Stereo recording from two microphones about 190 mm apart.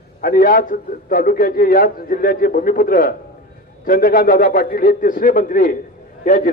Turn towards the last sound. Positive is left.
turn(degrees=45)  # may be behind; listen again after turning